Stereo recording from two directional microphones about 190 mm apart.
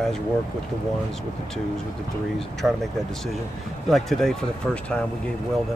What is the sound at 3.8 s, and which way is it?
Speech, centre (ahead or behind).